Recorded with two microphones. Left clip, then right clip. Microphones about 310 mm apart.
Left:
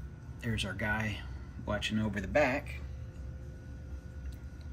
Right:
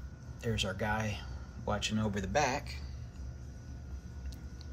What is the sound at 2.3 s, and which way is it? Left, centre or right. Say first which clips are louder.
Speech: left 3 dB; centre.